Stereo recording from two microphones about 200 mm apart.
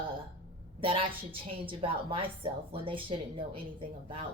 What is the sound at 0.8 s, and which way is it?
A woman's voice, 25° right (ahead or behind).